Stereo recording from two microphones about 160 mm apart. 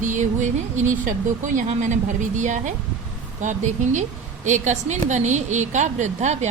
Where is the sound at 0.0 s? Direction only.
50° right (ahead or behind).